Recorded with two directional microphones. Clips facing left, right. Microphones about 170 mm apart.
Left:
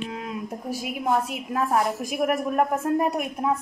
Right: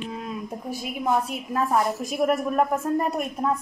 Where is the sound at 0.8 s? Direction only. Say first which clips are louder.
Even; 5° left (ahead or behind).